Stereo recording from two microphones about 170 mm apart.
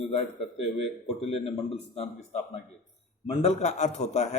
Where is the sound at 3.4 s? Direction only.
40° left (ahead or behind).